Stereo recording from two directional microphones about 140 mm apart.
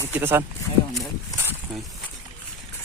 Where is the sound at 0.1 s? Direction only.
15° right (ahead or behind).